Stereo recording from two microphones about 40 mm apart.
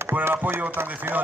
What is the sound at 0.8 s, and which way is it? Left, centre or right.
Speech, right.